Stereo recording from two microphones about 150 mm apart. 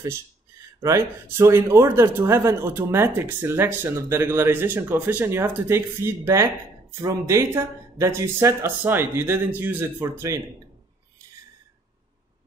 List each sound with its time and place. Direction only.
0.8 s a man's voice: 20° right (ahead or behind)